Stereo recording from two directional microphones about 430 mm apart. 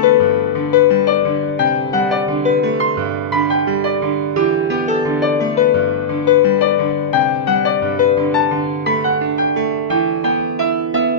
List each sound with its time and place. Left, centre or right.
0.0 s music: left
6.2 s music: left